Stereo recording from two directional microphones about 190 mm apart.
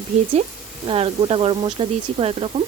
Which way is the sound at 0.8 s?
30° right (ahead or behind).